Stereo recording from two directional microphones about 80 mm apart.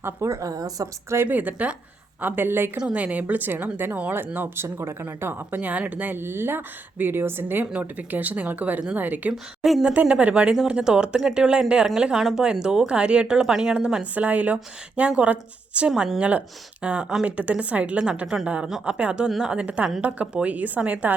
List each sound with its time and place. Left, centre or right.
0.0 s a woman's voice: right
1.1 s a woman's voice: right
2.7 s a woman's voice: centre
9.3 s a woman's voice: centre
9.8 s speech: centre
15.9 s speech: centre